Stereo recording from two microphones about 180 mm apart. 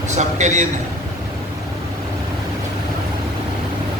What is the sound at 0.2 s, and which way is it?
Speech, 40° right (ahead or behind).